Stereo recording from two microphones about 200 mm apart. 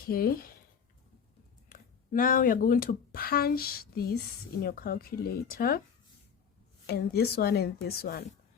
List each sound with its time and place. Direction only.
0.1 s a woman's voice: 50° left (ahead or behind)
1.7 s a woman's voice: 45° left (ahead or behind)
6.8 s a woman's voice: 55° left (ahead or behind)